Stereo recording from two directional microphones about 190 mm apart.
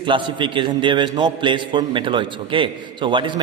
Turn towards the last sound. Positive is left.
turn(degrees=-25)  # may be behind; listen again after turning